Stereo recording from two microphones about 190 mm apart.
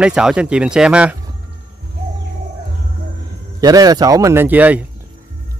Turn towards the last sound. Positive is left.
turn(degrees=-10)  # may be behind; listen again after turning